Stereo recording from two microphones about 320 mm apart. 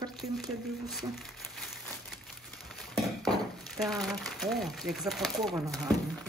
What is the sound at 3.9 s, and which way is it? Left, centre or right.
Speech, centre.